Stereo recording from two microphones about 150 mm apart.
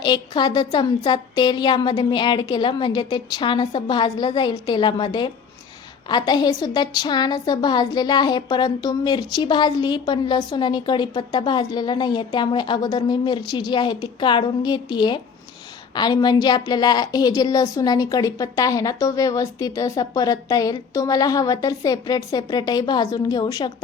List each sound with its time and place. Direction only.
0.0 s a woman's voice: 30° left (ahead or behind)